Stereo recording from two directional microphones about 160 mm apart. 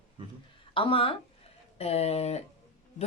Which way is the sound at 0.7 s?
35° left (ahead or behind).